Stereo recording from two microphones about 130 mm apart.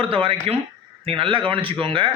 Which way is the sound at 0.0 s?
45° right (ahead or behind).